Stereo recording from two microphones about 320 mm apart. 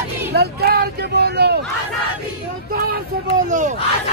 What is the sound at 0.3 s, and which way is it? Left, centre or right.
Speech, right.